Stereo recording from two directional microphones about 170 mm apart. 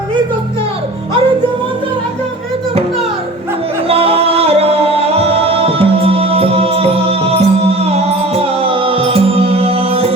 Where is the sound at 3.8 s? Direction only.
35° right (ahead or behind).